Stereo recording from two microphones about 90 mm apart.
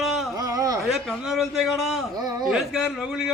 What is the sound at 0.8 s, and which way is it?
A man's voice, centre (ahead or behind).